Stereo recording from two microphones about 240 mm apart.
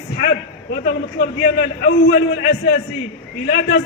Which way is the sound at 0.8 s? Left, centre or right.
Left.